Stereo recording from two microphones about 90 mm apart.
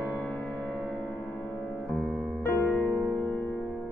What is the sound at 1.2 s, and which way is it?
Music, 15° left (ahead or behind).